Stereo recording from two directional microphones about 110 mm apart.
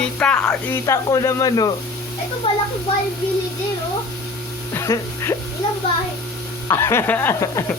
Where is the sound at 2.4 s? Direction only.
60° left (ahead or behind).